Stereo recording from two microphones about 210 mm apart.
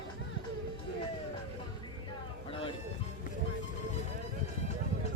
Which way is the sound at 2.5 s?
25° left (ahead or behind).